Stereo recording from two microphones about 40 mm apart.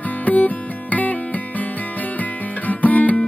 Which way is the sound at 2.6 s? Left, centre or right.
Left.